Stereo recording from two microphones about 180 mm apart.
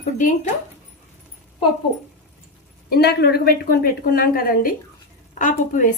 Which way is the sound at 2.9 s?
60° left (ahead or behind).